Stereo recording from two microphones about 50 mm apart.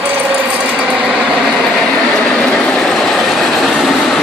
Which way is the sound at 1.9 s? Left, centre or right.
Centre.